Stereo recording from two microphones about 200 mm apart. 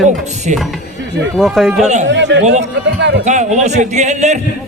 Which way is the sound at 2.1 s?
60° right (ahead or behind).